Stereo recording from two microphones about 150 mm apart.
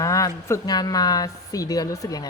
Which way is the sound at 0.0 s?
20° left (ahead or behind).